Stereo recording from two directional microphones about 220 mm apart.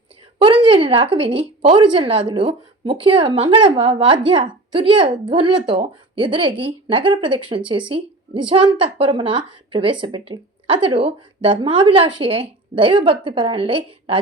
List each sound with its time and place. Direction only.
0.3 s speech: 25° right (ahead or behind)